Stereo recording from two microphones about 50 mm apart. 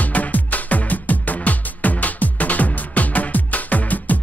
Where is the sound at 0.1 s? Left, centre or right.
Left.